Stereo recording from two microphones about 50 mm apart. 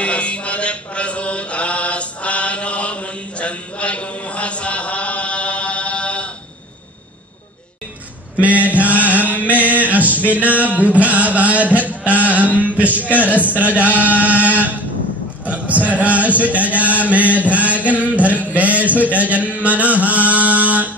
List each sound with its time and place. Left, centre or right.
0.0 s mantra: left
8.4 s chant: right
9.5 s male singing: right
12.3 s mantra: right
12.7 s chant: right
15.4 s a sound: right
16.0 s chant: right
17.5 s a sound: right
20.0 s mantra: right